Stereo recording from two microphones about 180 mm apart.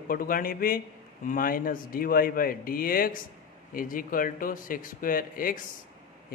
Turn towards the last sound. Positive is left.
turn(degrees=50)  # may be behind; listen again after turning